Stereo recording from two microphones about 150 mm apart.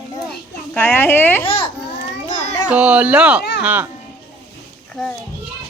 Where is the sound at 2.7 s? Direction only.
10° right (ahead or behind).